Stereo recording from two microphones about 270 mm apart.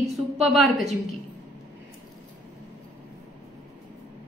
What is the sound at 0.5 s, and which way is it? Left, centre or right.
Speech, centre.